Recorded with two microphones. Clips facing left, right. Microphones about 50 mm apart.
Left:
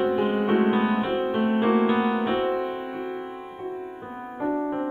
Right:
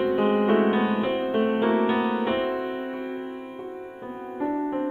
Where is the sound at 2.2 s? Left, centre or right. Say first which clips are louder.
Left 1 dB; centre.